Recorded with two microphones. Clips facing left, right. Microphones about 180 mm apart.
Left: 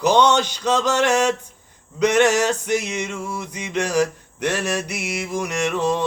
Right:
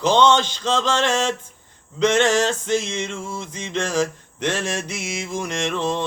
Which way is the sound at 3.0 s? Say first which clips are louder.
Left 1 dB; 25° right (ahead or behind).